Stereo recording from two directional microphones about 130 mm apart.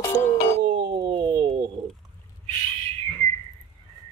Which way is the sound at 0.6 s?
35° right (ahead or behind).